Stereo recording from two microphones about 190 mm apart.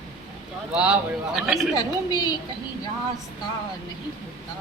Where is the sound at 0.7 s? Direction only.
5° right (ahead or behind).